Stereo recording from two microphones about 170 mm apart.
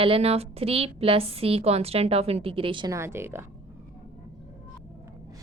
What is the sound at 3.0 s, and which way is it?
Speech, 15° right (ahead or behind).